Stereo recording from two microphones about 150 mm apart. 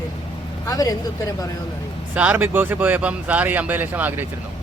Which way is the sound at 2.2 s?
10° right (ahead or behind).